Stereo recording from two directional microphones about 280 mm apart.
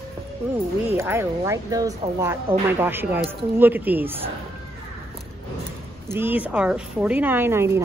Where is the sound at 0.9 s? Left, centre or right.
Centre.